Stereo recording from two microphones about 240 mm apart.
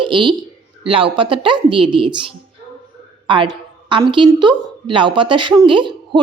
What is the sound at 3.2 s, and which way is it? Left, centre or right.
A woman's voice, centre.